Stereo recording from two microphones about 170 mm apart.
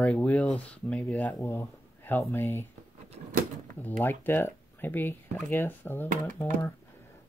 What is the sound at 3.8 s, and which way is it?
Speech, 10° left (ahead or behind).